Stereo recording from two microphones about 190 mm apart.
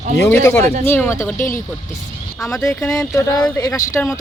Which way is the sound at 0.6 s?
35° right (ahead or behind).